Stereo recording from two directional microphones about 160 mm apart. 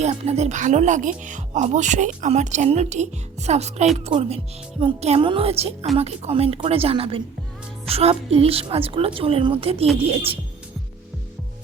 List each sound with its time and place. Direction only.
0.0 s a woman's voice: 45° right (ahead or behind)